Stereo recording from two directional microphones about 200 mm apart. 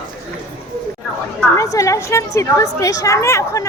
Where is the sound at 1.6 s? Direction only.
15° left (ahead or behind).